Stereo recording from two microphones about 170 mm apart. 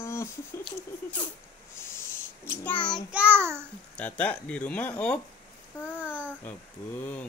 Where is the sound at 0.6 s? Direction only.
10° left (ahead or behind).